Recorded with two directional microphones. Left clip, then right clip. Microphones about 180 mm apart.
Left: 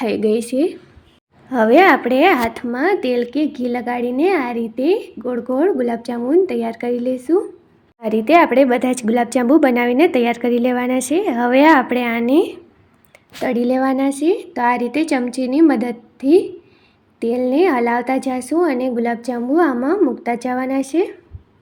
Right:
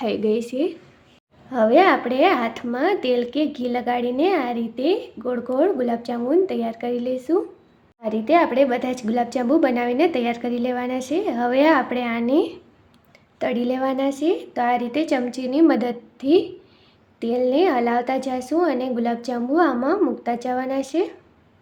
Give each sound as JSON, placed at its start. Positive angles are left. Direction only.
{"t": 0.0, "sound": "a woman's voice", "side_deg": 20}
{"t": 8.0, "sound": "a woman's voice", "side_deg": 30}